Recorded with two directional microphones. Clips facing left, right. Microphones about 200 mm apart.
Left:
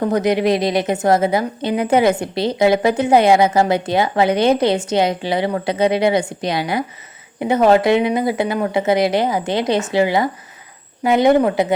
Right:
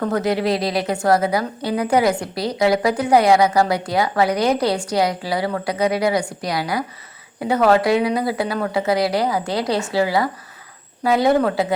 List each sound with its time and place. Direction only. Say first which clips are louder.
0.0 s a woman's voice: left 3 dB; 20° left (ahead or behind)